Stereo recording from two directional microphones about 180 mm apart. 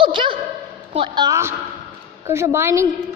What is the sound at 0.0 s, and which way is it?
Dog, 30° right (ahead or behind).